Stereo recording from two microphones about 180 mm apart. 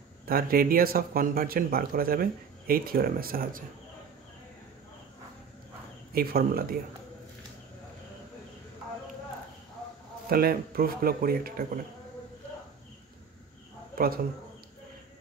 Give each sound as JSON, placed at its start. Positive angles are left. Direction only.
{"t": 0.3, "sound": "speech", "side_deg": -55}
{"t": 6.1, "sound": "speech", "side_deg": -55}
{"t": 10.3, "sound": "speech", "side_deg": -55}
{"t": 13.9, "sound": "speech", "side_deg": -55}